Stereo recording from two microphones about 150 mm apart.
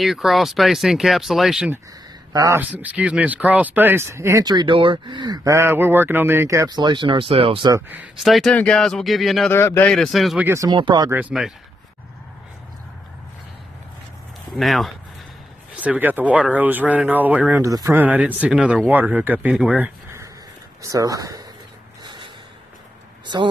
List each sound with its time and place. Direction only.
0.0 s speech: centre (ahead or behind)
2.3 s speech: 20° right (ahead or behind)
2.7 s speech: 10° right (ahead or behind); by 7.7 s 35° right (ahead or behind)
7.7 s speech: 10° right (ahead or behind)
8.2 s speech: centre (ahead or behind)
9.5 s speech: 15° left (ahead or behind); by 10.4 s centre (ahead or behind)
10.4 s speech: 20° right (ahead or behind)
10.8 s speech: 30° right (ahead or behind)
11.1 s speech: 10° right (ahead or behind)
14.5 s speech: centre (ahead or behind); by 21.5 s 25° right (ahead or behind)
22.0 s a sound: 30° right (ahead or behind)